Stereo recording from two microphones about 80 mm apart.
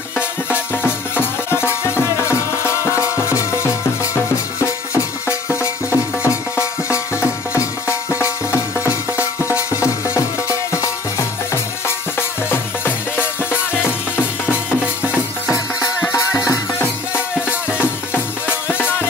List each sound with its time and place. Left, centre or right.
1.5 s music: left
5.6 s music: left
7.5 s music: left
16.1 s music: left
17.1 s music: centre
18.7 s music: left